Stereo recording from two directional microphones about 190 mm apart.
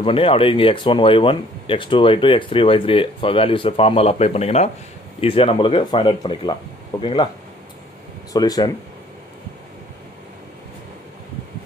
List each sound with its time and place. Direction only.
0.0 s speech: 30° left (ahead or behind)
8.3 s speech: 20° left (ahead or behind)